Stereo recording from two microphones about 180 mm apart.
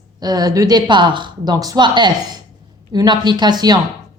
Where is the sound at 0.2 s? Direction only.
20° right (ahead or behind).